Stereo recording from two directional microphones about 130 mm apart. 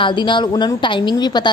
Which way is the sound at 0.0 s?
40° left (ahead or behind).